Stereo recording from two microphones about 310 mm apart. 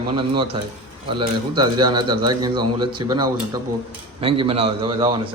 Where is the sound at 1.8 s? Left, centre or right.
Centre.